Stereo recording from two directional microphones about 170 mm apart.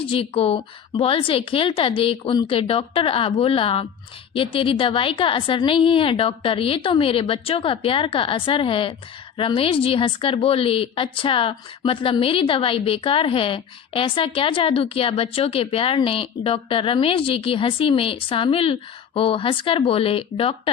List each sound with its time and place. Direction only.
0.0 s a woman's voice: 30° left (ahead or behind)